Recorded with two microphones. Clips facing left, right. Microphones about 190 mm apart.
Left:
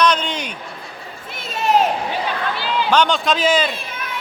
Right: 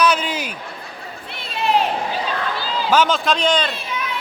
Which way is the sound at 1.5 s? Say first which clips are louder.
Left 2 dB; 45° left (ahead or behind).